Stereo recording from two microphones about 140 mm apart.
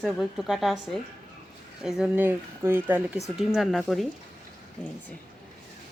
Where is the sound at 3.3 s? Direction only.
Centre (ahead or behind).